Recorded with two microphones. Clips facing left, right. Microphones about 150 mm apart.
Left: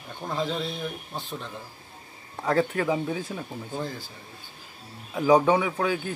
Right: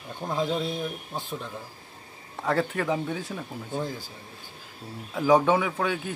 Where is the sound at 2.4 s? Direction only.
Centre (ahead or behind).